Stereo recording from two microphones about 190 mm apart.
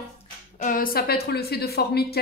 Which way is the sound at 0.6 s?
45° left (ahead or behind).